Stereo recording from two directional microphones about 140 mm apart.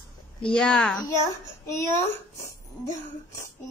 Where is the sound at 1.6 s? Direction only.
20° left (ahead or behind).